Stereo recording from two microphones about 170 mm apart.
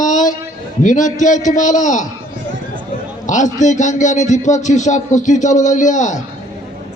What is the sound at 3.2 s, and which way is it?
A man's voice, 45° left (ahead or behind).